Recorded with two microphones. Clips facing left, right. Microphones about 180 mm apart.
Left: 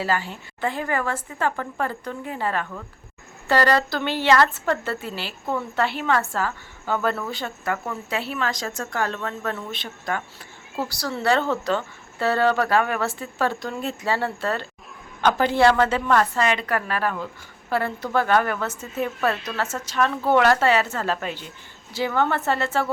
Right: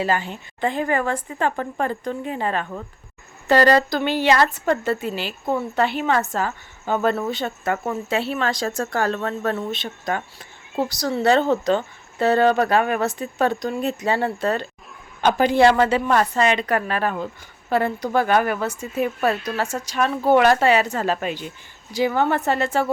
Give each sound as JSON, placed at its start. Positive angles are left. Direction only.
{"t": 0.0, "sound": "a woman's voice", "side_deg": -20}
{"t": 9.8, "sound": "a woman's voice", "side_deg": -20}